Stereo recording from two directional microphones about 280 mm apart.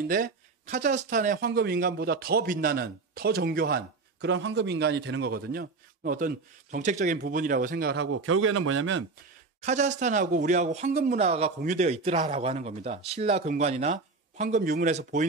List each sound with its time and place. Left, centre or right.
0.1 s speech: right
9.6 s speech: right